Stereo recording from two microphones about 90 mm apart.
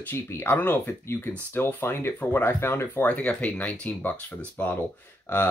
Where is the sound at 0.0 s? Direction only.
25° left (ahead or behind).